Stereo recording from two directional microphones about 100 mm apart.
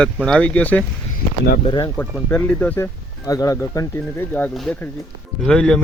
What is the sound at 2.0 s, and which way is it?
Speech, 15° left (ahead or behind).